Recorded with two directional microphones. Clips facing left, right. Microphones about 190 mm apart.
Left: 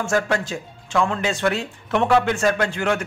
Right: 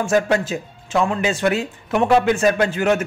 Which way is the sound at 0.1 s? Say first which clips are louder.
Right 4 dB; 20° right (ahead or behind).